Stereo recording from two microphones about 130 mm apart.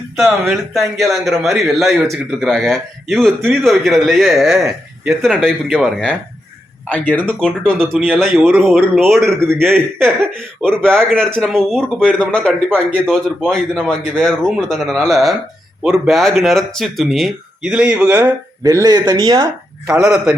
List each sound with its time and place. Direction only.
0.2 s a man's voice: centre (ahead or behind)
9.4 s a man's voice: 20° right (ahead or behind)
10.8 s a man's voice: 5° left (ahead or behind); by 18.3 s 10° right (ahead or behind)
18.6 s speech: 25° right (ahead or behind)
20.0 s a man's voice: 5° right (ahead or behind)